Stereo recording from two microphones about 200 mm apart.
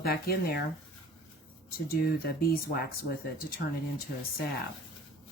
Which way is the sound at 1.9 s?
50° left (ahead or behind).